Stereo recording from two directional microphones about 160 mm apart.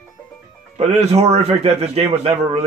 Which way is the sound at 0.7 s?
45° right (ahead or behind).